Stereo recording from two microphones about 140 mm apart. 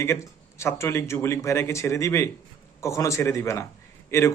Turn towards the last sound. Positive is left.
turn(degrees=20)  # may be behind; listen again after turning